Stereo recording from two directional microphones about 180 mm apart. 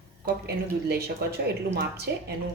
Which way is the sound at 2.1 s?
75° right (ahead or behind).